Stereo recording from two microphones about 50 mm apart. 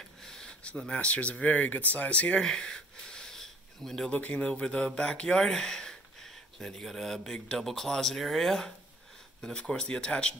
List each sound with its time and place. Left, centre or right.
0.2 s speech: centre
2.4 s a sound: centre
4.1 s speech: left